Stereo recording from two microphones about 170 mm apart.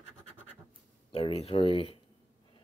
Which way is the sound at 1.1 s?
35° left (ahead or behind).